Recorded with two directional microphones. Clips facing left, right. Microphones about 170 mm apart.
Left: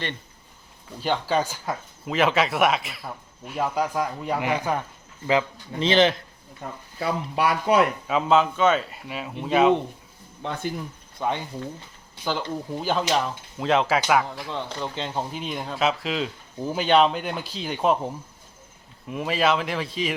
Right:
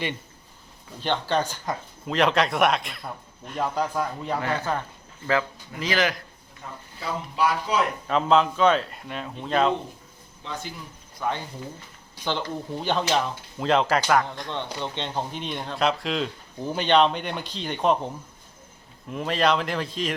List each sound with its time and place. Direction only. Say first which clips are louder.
0.9 s speech: left 1 dB; 5° left (ahead or behind)
5.7 s speech: left 6 dB; 25° left (ahead or behind)
6.6 s speech: left 6 dB; 65° left (ahead or behind)
8.0 s speech: even; 5° left (ahead or behind)
10.4 s speech: left 6 dB; 55° left (ahead or behind)
11.2 s speech: left 2 dB; 20° left (ahead or behind)
12.2 s speech: left 1 dB; 5° left (ahead or behind)